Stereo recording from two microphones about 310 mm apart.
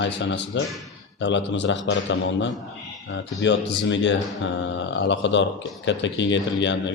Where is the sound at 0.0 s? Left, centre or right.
Left.